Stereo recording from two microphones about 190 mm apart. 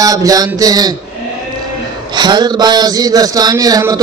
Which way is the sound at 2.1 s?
25° right (ahead or behind).